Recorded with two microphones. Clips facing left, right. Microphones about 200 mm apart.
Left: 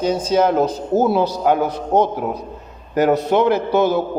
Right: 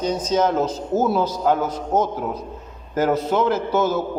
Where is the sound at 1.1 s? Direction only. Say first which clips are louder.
Left 3 dB; 70° left (ahead or behind).